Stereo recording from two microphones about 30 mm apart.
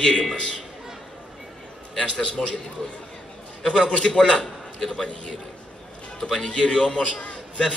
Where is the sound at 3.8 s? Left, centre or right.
Left.